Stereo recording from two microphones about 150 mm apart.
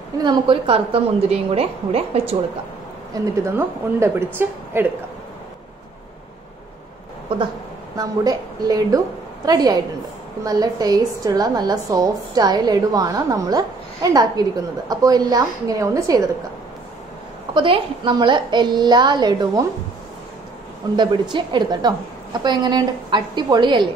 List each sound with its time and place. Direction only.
0.2 s a woman's voice: 30° right (ahead or behind)
3.4 s a woman's voice: 15° right (ahead or behind)
8.0 s a woman's voice: 25° right (ahead or behind)
17.6 s a woman's voice: 35° right (ahead or behind)
20.9 s a woman's voice: 30° right (ahead or behind)